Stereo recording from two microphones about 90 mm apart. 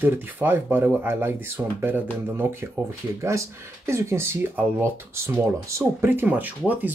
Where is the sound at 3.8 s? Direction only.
30° right (ahead or behind).